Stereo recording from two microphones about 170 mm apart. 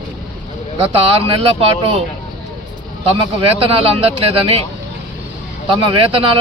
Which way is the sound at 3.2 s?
30° right (ahead or behind).